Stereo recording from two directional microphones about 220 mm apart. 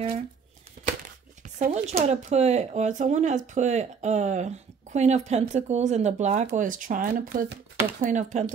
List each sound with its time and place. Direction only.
1.4 s speech: 35° right (ahead or behind)